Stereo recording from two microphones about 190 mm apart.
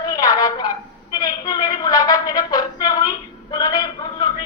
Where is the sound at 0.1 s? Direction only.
20° left (ahead or behind).